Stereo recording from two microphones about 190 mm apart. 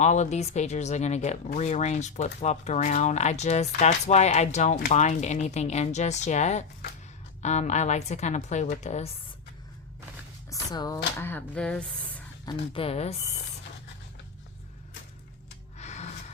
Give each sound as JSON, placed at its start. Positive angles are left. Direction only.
{"t": 0.0, "sound": "speech", "side_deg": 40}
{"t": 10.5, "sound": "speech", "side_deg": 20}
{"t": 12.5, "sound": "speech", "side_deg": 30}
{"t": 15.8, "sound": "music", "side_deg": 35}